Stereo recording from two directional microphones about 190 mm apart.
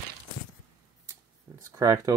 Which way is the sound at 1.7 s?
15° right (ahead or behind).